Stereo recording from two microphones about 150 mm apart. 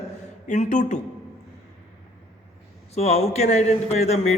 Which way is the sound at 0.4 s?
55° left (ahead or behind).